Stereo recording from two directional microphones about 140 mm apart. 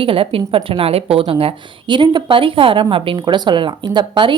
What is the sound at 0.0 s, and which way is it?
A woman's voice, 40° right (ahead or behind).